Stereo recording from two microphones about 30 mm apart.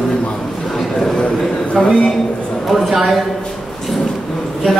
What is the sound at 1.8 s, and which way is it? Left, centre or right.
Speech, centre.